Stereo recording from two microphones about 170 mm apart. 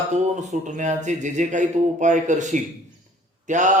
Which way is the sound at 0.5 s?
45° right (ahead or behind).